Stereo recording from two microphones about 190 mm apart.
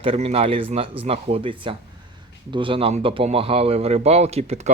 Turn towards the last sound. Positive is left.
turn(degrees=-35)  # may be behind; listen again after turning